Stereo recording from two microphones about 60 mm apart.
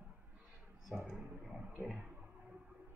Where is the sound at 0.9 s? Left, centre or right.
Right.